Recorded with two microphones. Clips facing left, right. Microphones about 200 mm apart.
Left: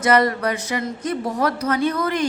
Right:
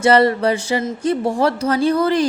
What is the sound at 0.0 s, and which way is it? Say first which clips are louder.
A woman's voice: right 4 dB; 30° right (ahead or behind).